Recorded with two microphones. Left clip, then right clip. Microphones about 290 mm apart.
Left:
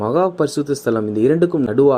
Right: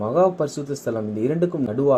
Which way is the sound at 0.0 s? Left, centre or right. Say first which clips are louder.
Left 2 dB; left.